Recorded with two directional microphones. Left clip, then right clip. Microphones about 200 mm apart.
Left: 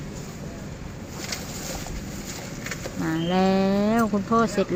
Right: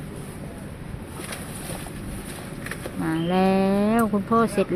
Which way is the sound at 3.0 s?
5° right (ahead or behind).